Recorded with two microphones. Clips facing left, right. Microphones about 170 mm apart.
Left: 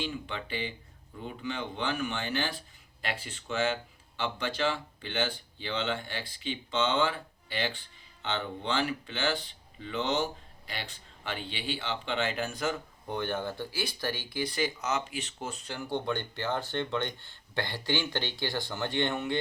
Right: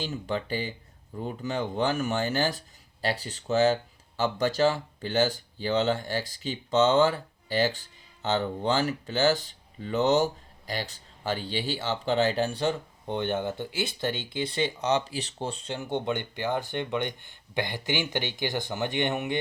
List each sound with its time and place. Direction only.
0.0 s speech: 40° right (ahead or behind); by 19.4 s 20° right (ahead or behind)